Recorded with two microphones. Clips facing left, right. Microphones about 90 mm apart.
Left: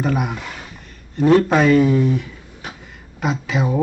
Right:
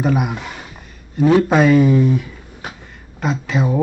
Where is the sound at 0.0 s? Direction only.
5° right (ahead or behind).